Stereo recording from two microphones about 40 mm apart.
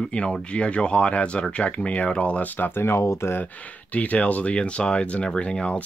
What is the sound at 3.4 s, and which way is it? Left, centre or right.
Speech, left.